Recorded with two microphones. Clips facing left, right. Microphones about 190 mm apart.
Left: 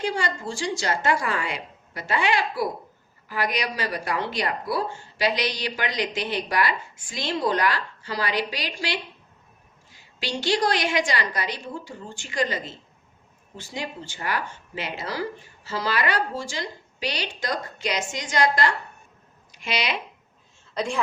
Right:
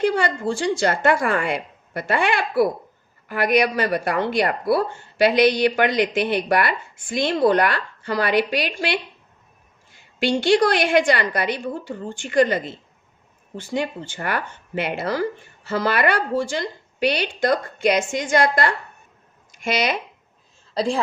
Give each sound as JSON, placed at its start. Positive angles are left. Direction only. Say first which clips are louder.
{"t": 0.0, "sound": "a woman's voice", "louder": "right 7 dB", "side_deg": -55}
{"t": 20.7, "sound": "a woman's voice", "louder": "right 6 dB", "side_deg": -35}